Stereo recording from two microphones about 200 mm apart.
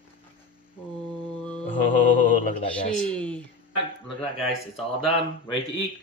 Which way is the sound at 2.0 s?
40° left (ahead or behind).